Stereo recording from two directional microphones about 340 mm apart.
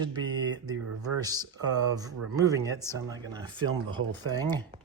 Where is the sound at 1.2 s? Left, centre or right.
Centre.